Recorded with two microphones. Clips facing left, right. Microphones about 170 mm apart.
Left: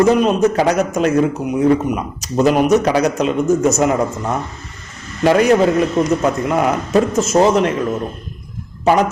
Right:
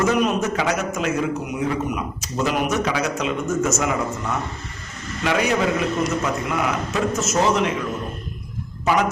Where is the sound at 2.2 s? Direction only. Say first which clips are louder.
Left 10 dB; 40° left (ahead or behind).